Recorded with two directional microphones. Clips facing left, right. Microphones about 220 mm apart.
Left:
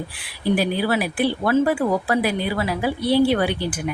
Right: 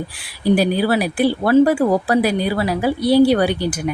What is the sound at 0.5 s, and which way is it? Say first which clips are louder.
Speech: right 4 dB; 40° right (ahead or behind).